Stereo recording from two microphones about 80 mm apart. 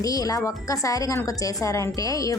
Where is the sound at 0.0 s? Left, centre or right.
Left.